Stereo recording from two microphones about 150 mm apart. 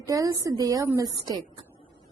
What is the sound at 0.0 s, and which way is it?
A woman's voice, 25° right (ahead or behind).